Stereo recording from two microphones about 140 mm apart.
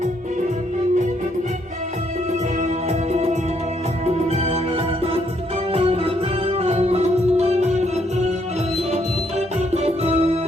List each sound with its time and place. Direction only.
2.6 s music: 50° right (ahead or behind)
5.7 s music: 45° right (ahead or behind)
9.6 s music: 50° right (ahead or behind)